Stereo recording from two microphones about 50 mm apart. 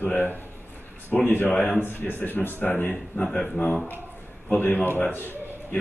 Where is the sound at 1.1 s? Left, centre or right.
Left.